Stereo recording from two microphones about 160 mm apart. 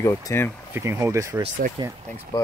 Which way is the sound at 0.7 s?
15° right (ahead or behind).